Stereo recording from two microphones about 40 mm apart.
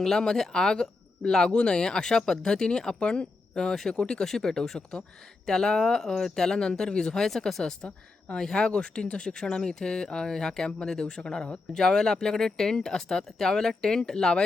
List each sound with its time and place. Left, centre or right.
0.3 s speech: centre